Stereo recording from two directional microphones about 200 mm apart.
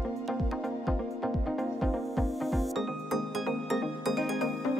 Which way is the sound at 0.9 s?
Centre (ahead or behind).